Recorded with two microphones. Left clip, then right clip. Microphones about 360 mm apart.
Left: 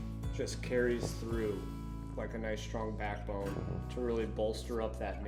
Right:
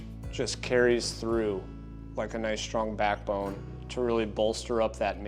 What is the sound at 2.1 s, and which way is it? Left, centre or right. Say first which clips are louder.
Speech: right 8 dB; left.